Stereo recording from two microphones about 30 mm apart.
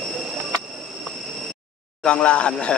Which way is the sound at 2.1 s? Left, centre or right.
Left.